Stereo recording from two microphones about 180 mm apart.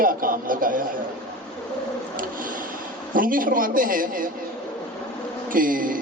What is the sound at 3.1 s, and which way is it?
Speech, 50° right (ahead or behind).